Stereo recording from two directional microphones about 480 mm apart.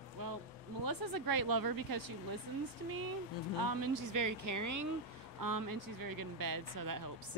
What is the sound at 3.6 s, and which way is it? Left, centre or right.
Speech, right.